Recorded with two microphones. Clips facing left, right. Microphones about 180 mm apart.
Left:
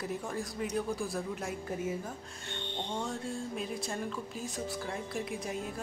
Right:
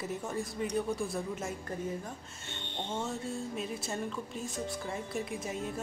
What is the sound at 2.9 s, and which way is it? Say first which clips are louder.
Speech: right 1 dB; 5° right (ahead or behind).